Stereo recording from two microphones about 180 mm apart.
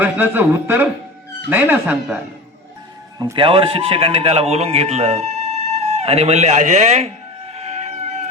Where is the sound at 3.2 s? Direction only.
25° right (ahead or behind).